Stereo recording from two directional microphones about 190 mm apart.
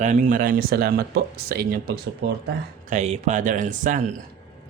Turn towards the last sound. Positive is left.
turn(degrees=-40)  # may be behind; listen again after turning